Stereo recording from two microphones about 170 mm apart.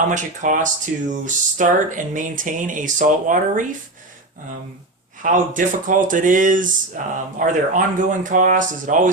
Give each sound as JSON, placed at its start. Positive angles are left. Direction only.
{"t": 0.1, "sound": "speech", "side_deg": -50}
{"t": 5.2, "sound": "speech", "side_deg": -50}